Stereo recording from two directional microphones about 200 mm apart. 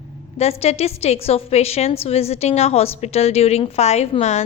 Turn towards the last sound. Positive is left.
turn(degrees=35)  # may be behind; listen again after turning